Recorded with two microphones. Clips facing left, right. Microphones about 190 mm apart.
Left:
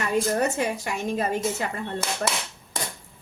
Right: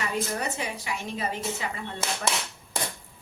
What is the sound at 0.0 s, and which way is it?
A woman's voice, 45° left (ahead or behind).